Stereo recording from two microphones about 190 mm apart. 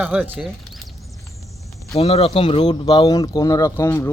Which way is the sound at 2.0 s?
30° left (ahead or behind).